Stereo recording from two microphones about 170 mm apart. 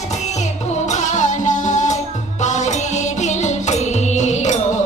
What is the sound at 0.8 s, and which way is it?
Music, 45° left (ahead or behind).